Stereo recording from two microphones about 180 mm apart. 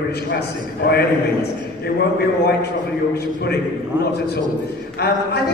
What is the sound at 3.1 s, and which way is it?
Speech, 60° left (ahead or behind).